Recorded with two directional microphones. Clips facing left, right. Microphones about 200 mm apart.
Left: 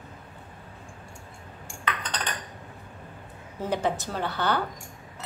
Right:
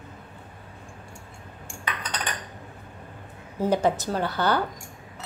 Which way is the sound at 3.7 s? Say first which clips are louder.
Right 4 dB; 40° right (ahead or behind).